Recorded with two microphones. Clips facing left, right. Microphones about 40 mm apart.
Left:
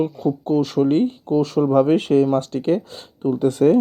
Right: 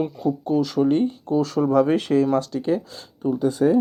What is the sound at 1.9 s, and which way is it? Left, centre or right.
Speech, left.